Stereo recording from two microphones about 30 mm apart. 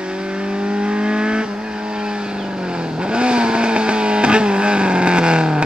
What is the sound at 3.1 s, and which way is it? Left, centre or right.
Vehicle, right.